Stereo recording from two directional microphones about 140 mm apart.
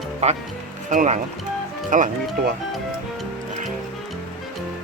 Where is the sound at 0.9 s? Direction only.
60° right (ahead or behind).